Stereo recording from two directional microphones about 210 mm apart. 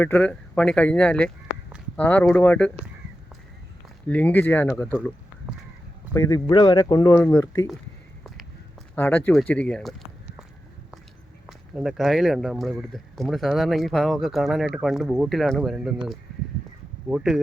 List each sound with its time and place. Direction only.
0.0 s speech: 5° left (ahead or behind)
4.1 s speech: 10° left (ahead or behind)
6.1 s speech: 15° left (ahead or behind)
9.0 s speech: 10° left (ahead or behind)
11.4 s speech: centre (ahead or behind)
17.1 s speech: 5° right (ahead or behind)